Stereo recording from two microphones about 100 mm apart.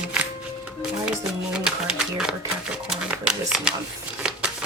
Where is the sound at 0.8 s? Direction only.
5° right (ahead or behind).